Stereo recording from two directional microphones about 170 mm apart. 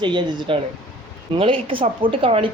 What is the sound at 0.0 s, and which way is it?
A woman's voice, 25° right (ahead or behind).